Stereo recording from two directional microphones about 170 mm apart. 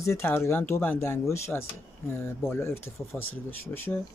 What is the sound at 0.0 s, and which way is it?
Speech, 15° left (ahead or behind).